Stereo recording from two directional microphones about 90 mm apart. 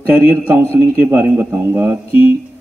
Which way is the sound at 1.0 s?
20° right (ahead or behind).